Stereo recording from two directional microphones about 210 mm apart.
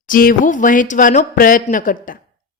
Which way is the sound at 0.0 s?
40° left (ahead or behind).